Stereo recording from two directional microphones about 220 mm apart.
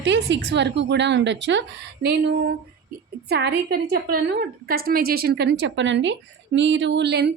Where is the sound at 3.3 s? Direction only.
45° right (ahead or behind).